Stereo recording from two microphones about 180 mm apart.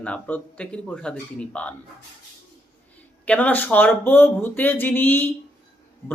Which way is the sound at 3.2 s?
10° left (ahead or behind).